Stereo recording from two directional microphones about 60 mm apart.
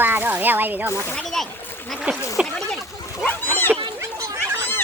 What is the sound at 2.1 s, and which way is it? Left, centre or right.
Speech, right.